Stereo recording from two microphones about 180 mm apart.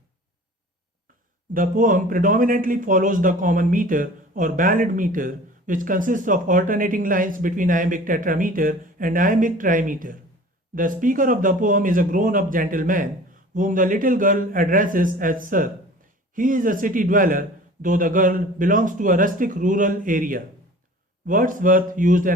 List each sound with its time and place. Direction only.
1.5 s speech: 45° right (ahead or behind)